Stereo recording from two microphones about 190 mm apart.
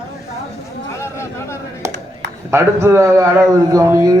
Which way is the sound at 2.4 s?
15° right (ahead or behind).